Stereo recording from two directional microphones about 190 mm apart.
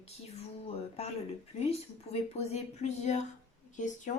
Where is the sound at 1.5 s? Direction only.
35° left (ahead or behind).